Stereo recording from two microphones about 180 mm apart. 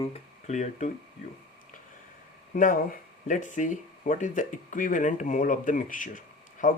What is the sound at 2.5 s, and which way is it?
Speech, 50° left (ahead or behind).